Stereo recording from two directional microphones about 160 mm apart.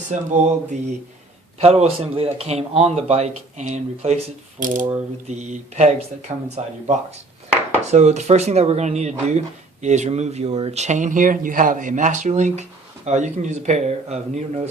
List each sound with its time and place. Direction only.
0.1 s speech: 50° right (ahead or behind)
4.6 s mechanisms: 55° right (ahead or behind)
5.3 s speech: 45° right (ahead or behind)
7.9 s speech: 45° right (ahead or behind)